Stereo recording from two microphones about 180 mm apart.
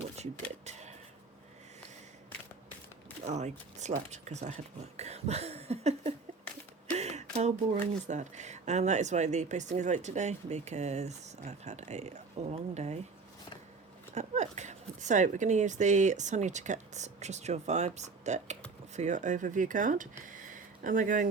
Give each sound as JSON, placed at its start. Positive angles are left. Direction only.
{"t": 0.6, "sound": "a sound", "side_deg": -40}
{"t": 3.2, "sound": "speech", "side_deg": -40}
{"t": 14.1, "sound": "speech", "side_deg": -40}